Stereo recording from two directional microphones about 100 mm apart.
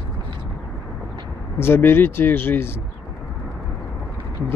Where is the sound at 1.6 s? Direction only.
20° left (ahead or behind).